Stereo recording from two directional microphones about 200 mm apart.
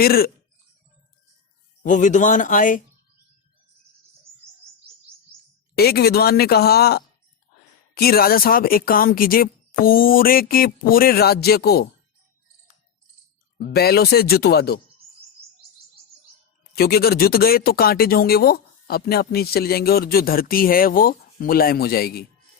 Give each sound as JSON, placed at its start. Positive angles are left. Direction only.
{"t": 0.0, "sound": "speech", "side_deg": 50}
{"t": 1.8, "sound": "speech", "side_deg": 40}
{"t": 5.7, "sound": "speech", "side_deg": 50}
{"t": 13.6, "sound": "speech", "side_deg": 50}
{"t": 16.7, "sound": "speech", "side_deg": 50}